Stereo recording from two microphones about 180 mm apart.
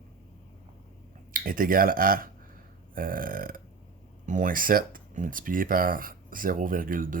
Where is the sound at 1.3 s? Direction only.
50° right (ahead or behind).